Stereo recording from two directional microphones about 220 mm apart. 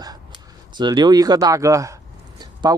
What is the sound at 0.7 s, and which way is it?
Speech, 20° right (ahead or behind).